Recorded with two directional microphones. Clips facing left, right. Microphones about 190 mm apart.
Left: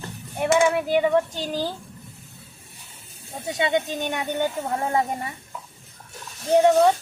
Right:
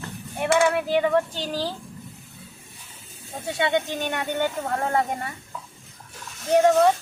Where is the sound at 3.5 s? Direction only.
15° left (ahead or behind).